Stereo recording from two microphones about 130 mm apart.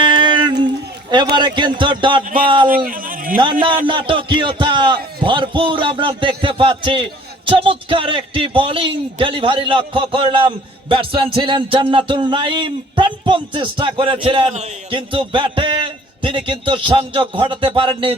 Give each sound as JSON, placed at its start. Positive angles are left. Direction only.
{"t": 0.0, "sound": "a sound", "side_deg": -35}
{"t": 1.1, "sound": "a man's voice", "side_deg": -35}
{"t": 2.6, "sound": "speech", "side_deg": -90}
{"t": 3.4, "sound": "a man's voice", "side_deg": -40}